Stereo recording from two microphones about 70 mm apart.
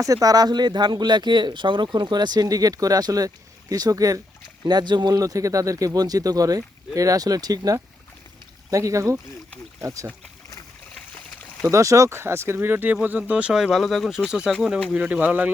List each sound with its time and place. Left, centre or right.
0.0 s speech: right
4.6 s speech: right
5.2 s speech: right
8.7 s speech: right
11.7 s speech: right; by 13.5 s centre
13.5 s speech: centre
14.3 s speech: centre